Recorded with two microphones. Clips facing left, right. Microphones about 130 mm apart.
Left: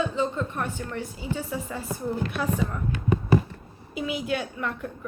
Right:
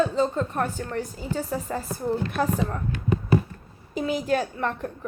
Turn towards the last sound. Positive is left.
turn(degrees=-40)  # may be behind; listen again after turning